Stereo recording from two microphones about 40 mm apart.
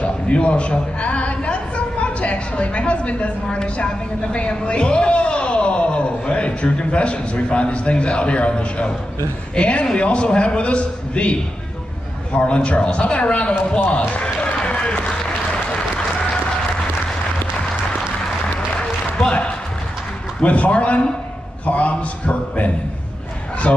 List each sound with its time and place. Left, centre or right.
0.0 s a woman's voice: left
12.4 s a man's voice: left
13.9 s basketball bounce: left
18.8 s applause: centre
20.4 s a man's voice: left